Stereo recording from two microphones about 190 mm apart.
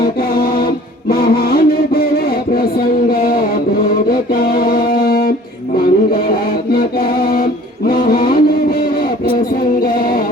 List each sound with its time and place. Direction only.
0.2 s mantra: 50° left (ahead or behind)
4.1 s music: 50° left (ahead or behind)
8.8 s a sound: 50° left (ahead or behind)
9.8 s music: 50° left (ahead or behind)